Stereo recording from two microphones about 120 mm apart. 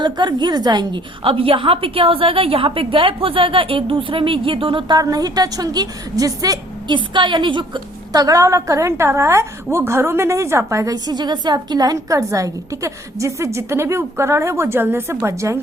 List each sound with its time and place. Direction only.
0.0 s a woman's voice: 35° right (ahead or behind)